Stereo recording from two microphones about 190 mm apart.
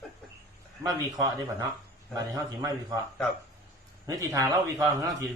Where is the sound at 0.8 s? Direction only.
20° right (ahead or behind).